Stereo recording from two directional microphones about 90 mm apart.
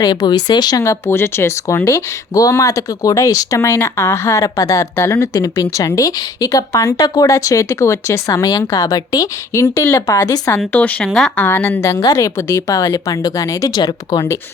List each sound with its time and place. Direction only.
0.0 s speech: 50° left (ahead or behind)
0.8 s speech: 30° left (ahead or behind)
5.3 s speech: 40° left (ahead or behind)
10.7 s speech: 15° left (ahead or behind); by 14.3 s 45° left (ahead or behind)